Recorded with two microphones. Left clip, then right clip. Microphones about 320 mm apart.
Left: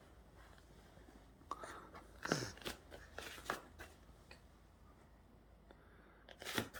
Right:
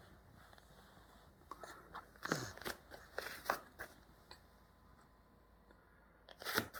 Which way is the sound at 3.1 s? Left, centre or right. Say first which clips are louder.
Right 5 dB; centre.